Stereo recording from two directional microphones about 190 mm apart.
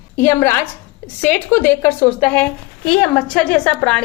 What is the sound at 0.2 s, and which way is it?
A woman's voice, 10° left (ahead or behind).